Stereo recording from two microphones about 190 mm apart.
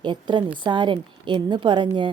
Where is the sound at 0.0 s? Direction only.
25° right (ahead or behind).